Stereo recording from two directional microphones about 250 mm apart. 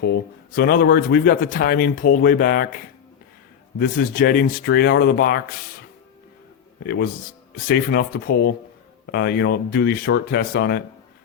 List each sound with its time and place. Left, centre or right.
0.5 s speech: left
3.8 s speech: left
6.8 s speech: left